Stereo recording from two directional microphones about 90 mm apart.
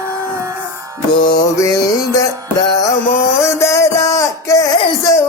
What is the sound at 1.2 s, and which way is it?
Mantra, 50° left (ahead or behind).